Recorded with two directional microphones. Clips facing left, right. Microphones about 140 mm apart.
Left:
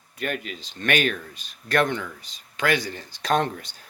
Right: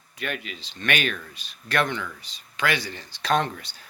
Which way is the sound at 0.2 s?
45° left (ahead or behind).